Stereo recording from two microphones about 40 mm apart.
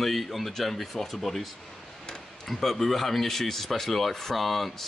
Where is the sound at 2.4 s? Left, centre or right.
Centre.